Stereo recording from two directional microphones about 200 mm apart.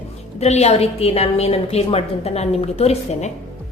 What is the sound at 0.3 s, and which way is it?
A woman's voice, 35° left (ahead or behind).